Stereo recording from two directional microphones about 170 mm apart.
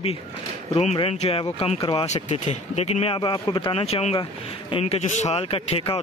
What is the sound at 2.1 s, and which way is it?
Speech, 40° left (ahead or behind).